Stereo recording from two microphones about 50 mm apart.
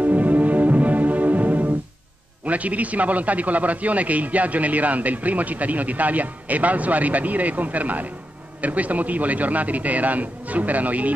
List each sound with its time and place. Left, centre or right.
0.0 s music: right
2.4 s a man's voice: right